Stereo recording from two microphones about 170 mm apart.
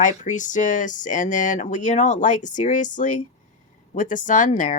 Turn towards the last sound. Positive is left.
turn(degrees=50)  # may be behind; listen again after turning